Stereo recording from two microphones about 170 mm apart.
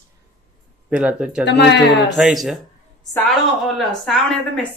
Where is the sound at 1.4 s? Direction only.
90° left.